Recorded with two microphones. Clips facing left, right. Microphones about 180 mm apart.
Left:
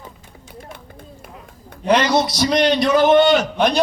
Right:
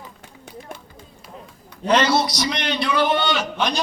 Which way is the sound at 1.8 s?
10° left (ahead or behind).